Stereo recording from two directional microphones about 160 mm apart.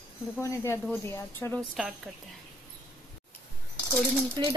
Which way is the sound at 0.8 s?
15° left (ahead or behind).